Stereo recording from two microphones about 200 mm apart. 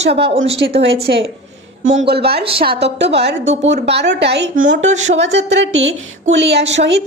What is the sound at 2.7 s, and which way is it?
Speech, 55° right (ahead or behind).